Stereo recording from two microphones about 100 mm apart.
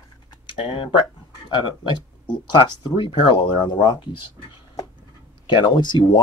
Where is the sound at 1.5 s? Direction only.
55° left (ahead or behind).